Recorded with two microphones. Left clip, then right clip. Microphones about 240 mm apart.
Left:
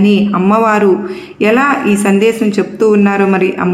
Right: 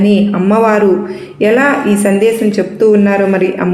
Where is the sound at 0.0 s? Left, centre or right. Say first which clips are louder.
Even; left.